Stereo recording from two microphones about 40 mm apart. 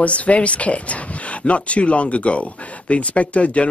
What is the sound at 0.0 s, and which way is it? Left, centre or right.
A man's voice, left.